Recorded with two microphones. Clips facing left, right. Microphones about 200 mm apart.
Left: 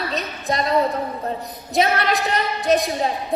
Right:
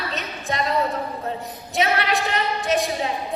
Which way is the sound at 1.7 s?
35° left (ahead or behind).